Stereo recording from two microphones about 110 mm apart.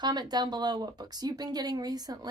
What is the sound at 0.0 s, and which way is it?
A woman's voice, 40° right (ahead or behind).